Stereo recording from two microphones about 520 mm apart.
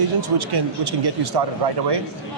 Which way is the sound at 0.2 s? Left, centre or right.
Right.